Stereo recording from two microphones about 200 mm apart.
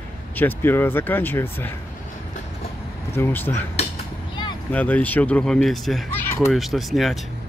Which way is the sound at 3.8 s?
30° left (ahead or behind).